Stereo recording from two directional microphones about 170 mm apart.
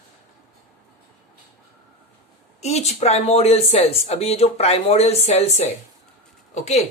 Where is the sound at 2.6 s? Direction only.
40° left (ahead or behind).